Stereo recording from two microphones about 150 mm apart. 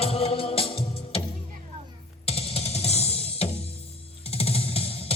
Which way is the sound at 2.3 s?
40° left (ahead or behind).